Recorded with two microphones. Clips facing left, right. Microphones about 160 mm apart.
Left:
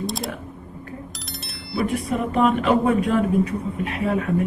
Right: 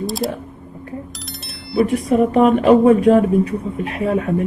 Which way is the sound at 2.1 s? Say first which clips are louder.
Right 7 dB; 35° right (ahead or behind).